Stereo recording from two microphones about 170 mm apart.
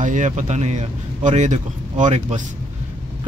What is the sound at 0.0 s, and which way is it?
Speech, 45° right (ahead or behind).